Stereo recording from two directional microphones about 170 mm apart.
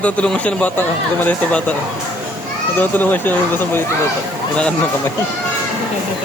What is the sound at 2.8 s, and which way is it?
Speech, 10° left (ahead or behind).